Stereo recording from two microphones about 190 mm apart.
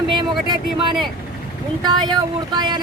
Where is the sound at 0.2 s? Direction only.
25° right (ahead or behind).